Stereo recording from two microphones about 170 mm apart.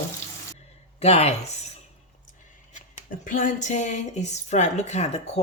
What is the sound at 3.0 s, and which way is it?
A woman's voice, 50° left (ahead or behind).